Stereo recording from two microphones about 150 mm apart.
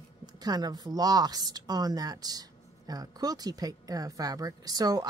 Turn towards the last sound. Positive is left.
turn(degrees=-25)  # may be behind; listen again after turning